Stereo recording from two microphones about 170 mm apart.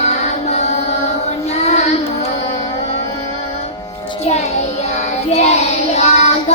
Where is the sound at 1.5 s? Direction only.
40° left (ahead or behind).